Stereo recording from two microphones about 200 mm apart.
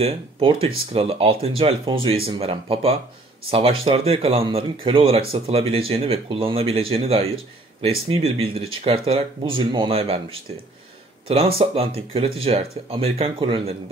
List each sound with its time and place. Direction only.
0.0 s speech: 30° right (ahead or behind)